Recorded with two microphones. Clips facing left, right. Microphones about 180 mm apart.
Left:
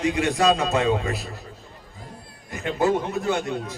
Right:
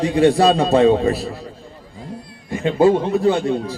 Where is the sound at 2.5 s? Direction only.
25° right (ahead or behind).